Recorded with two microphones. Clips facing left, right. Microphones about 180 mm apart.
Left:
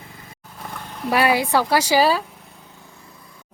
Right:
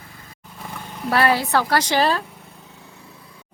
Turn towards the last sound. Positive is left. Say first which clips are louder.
# right 1 dB
turn(degrees=0)  # may be behind; listen again after turning